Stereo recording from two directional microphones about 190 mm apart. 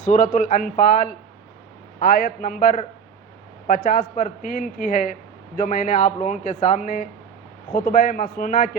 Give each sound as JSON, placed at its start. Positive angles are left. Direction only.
{"t": 0.0, "sound": "speech", "side_deg": 40}
{"t": 3.8, "sound": "speech", "side_deg": 45}